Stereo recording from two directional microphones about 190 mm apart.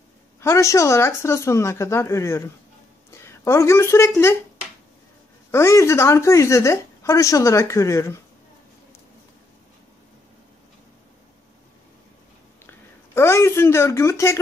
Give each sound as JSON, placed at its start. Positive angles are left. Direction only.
{"t": 0.4, "sound": "speech", "side_deg": 15}
{"t": 5.5, "sound": "speech", "side_deg": 15}
{"t": 12.6, "sound": "a woman's voice", "side_deg": 15}